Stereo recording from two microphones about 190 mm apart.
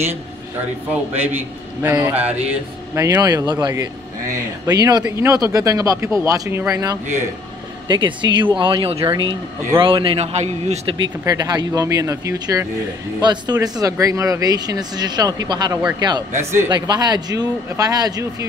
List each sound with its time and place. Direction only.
1.1 s speech: 10° right (ahead or behind); by 11.0 s 35° right (ahead or behind)
11.2 s speech: 20° right (ahead or behind)